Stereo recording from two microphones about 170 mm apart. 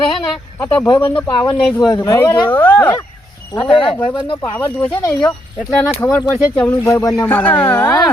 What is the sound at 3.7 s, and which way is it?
Speech, 30° left (ahead or behind).